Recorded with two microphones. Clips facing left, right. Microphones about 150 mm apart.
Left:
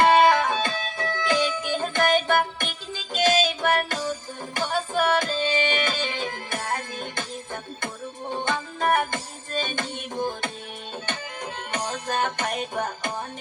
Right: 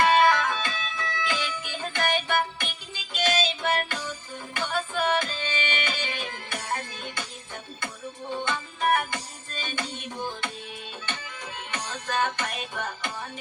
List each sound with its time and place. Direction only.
0.0 s music: 25° left (ahead or behind)
0.6 s music: 35° left (ahead or behind)
11.7 s music: 45° left (ahead or behind)